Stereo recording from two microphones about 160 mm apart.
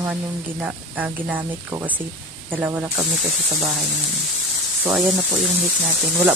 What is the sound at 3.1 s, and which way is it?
Speech, centre (ahead or behind).